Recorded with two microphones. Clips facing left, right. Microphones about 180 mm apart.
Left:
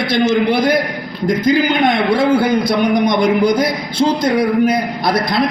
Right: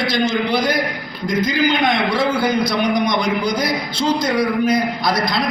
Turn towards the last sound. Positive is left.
turn(degrees=55)  # may be behind; listen again after turning